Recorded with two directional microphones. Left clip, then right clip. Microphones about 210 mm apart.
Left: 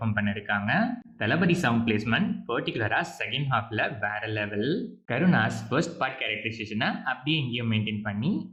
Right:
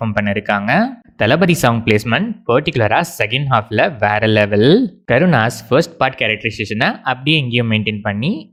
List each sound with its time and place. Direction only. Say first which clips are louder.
0.0 s speech: right 12 dB; 45° right (ahead or behind)